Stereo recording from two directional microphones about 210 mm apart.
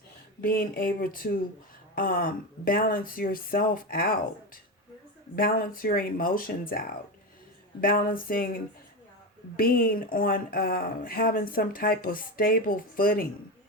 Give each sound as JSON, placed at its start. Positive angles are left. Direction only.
{"t": 0.4, "sound": "speech", "side_deg": 45}